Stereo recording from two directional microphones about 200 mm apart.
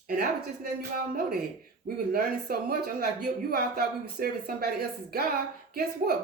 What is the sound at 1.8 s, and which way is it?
Speech, 50° right (ahead or behind).